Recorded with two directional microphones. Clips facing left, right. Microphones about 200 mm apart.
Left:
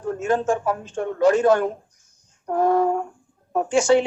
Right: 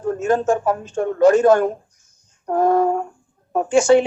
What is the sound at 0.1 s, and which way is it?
Speech, 40° right (ahead or behind).